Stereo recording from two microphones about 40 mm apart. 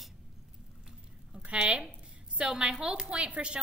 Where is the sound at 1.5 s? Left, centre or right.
Right.